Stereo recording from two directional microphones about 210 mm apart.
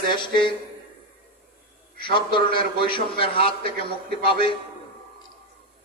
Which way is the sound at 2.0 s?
25° left (ahead or behind).